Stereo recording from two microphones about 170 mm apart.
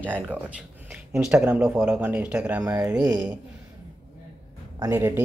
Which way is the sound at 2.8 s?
20° right (ahead or behind).